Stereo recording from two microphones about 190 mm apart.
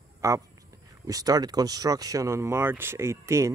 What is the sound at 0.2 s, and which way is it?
Speech, 15° right (ahead or behind).